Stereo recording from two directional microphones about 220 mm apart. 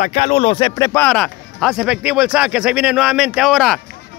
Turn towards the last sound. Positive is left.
turn(degrees=0)  # may be behind; listen again after turning